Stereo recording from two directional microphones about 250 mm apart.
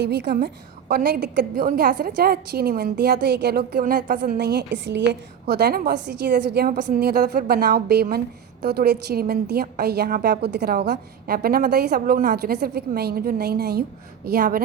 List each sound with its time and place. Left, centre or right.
0.0 s a woman's voice: right